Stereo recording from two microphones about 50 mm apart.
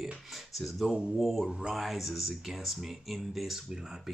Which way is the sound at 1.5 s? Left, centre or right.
Centre.